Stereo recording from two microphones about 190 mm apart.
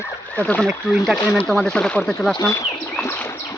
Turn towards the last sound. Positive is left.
turn(degrees=10)  # may be behind; listen again after turning